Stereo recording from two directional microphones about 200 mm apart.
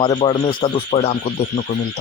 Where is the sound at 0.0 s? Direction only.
25° left (ahead or behind).